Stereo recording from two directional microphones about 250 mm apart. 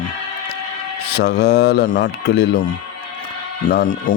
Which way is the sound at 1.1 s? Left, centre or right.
Left.